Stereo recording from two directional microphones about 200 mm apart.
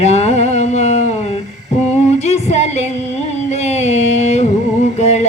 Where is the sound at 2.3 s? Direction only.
35° left (ahead or behind).